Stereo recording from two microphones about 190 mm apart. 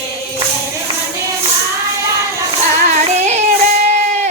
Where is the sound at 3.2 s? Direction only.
35° right (ahead or behind).